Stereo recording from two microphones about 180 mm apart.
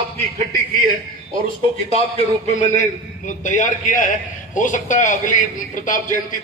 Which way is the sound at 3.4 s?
45° left (ahead or behind).